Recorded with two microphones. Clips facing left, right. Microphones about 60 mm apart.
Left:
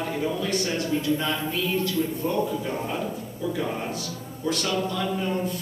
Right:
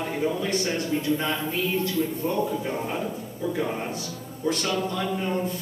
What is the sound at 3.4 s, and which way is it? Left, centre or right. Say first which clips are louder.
Speech: right 1 dB; right.